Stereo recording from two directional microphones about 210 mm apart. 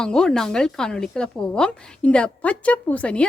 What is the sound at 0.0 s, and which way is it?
Speech, 5° left (ahead or behind).